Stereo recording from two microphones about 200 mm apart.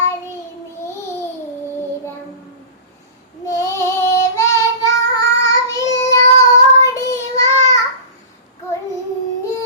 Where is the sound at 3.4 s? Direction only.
15° left (ahead or behind).